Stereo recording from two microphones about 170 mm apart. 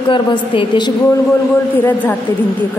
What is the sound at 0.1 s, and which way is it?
Speech, 30° left (ahead or behind).